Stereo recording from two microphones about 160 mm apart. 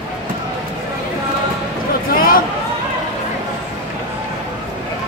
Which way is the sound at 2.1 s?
65° left (ahead or behind).